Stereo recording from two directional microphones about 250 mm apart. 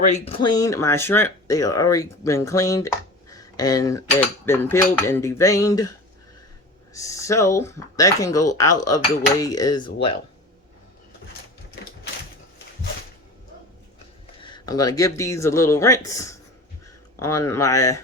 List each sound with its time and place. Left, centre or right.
0.0 s speech: left
6.9 s speech: centre
14.4 s speech: centre